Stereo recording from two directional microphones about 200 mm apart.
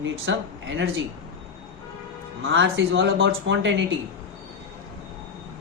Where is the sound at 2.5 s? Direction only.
70° right (ahead or behind).